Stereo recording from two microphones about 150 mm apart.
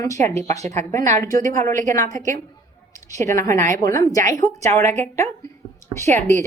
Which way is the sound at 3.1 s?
20° left (ahead or behind).